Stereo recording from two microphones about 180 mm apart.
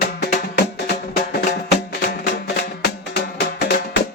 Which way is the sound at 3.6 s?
65° left (ahead or behind).